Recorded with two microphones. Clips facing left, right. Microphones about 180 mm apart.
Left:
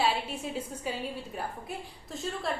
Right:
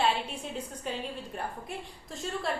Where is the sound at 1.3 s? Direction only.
Centre (ahead or behind).